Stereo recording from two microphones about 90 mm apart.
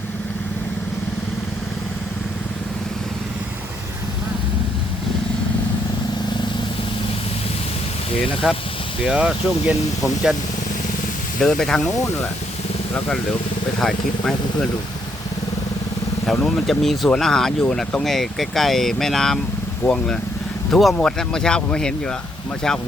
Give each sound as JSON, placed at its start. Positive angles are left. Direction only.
{"t": 8.2, "sound": "speech", "side_deg": 85}
{"t": 9.0, "sound": "speech", "side_deg": -10}
{"t": 11.3, "sound": "speech", "side_deg": 5}
{"t": 13.7, "sound": "speech", "side_deg": 5}
{"t": 16.3, "sound": "speech", "side_deg": 5}
{"t": 19.8, "sound": "speech", "side_deg": 30}
{"t": 20.7, "sound": "speech", "side_deg": 5}